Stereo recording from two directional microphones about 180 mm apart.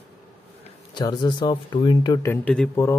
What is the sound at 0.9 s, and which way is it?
Speech, 25° left (ahead or behind).